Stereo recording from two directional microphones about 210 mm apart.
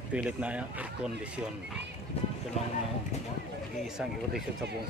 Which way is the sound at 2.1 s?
30° left (ahead or behind).